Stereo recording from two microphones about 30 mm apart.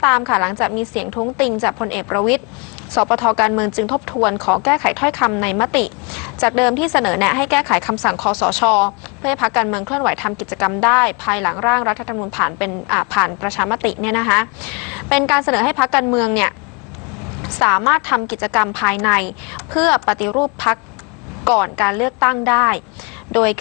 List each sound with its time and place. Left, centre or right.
0.0 s a woman's voice: centre